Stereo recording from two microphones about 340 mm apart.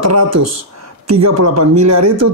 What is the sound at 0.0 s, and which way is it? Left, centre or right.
Speech, right.